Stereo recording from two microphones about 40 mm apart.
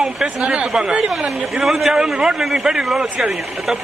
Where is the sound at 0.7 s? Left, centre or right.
Right.